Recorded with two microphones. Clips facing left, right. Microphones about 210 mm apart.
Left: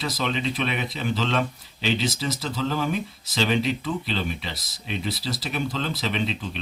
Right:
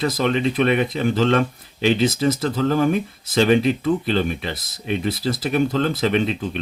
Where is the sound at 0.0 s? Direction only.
50° right (ahead or behind).